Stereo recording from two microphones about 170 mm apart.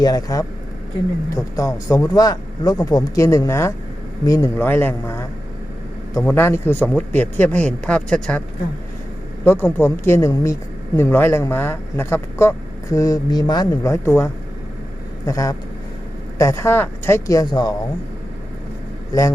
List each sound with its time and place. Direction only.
0.0 s speech: 20° left (ahead or behind); by 8.4 s 5° left (ahead or behind)
9.4 s speech: 10° left (ahead or behind)
15.3 s speech: 20° left (ahead or behind)